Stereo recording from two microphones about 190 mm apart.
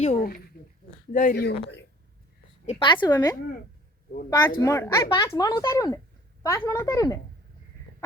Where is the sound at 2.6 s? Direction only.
25° left (ahead or behind).